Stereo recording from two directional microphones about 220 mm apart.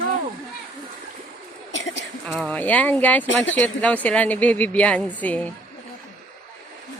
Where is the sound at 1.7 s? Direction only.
55° left (ahead or behind).